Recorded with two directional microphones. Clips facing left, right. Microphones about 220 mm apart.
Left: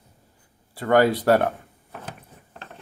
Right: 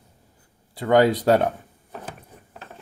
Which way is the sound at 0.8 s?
15° right (ahead or behind).